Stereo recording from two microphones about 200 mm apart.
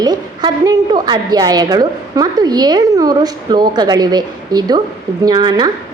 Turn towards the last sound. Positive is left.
turn(degrees=-20)  # may be behind; listen again after turning